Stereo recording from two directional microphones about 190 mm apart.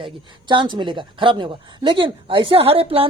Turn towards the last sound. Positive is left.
turn(degrees=-30)  # may be behind; listen again after turning